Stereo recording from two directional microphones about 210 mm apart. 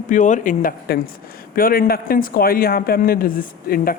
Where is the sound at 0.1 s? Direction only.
35° left (ahead or behind).